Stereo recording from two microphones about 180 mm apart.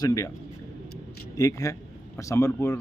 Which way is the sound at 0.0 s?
20° left (ahead or behind).